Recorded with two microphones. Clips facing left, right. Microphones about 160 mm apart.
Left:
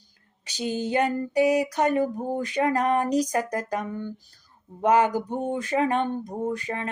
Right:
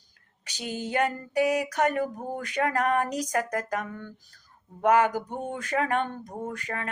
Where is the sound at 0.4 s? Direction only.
30° left (ahead or behind).